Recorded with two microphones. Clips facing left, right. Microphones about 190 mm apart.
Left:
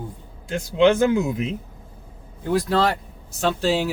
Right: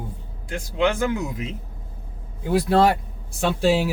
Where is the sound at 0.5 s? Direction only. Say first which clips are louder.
Left 5 dB; 25° left (ahead or behind).